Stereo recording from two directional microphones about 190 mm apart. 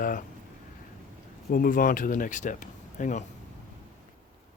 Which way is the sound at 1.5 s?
50° left (ahead or behind).